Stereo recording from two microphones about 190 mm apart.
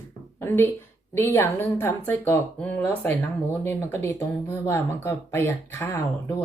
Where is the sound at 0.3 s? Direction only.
10° left (ahead or behind).